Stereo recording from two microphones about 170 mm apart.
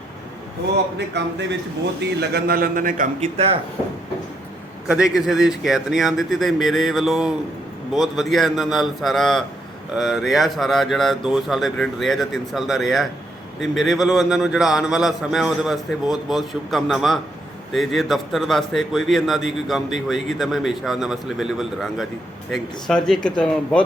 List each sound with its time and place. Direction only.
0.9 s a man's voice: 90° right
2.0 s a man's voice: 65° right (ahead or behind); by 3.6 s 35° right (ahead or behind)
4.9 s a man's voice: 5° right (ahead or behind)